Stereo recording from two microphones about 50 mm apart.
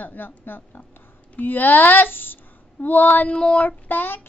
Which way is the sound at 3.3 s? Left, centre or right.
Centre.